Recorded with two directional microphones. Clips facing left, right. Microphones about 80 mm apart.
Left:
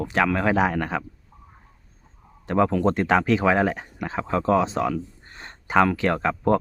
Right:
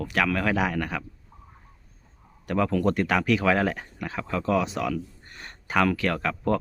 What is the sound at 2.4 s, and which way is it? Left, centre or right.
Speech, left.